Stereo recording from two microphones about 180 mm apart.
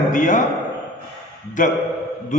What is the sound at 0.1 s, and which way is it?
Speech, 45° left (ahead or behind).